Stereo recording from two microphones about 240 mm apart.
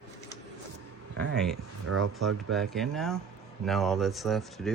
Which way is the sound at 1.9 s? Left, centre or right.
Right.